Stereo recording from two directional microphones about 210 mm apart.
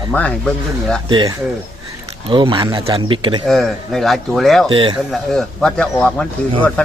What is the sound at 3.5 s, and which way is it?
Speech, centre (ahead or behind).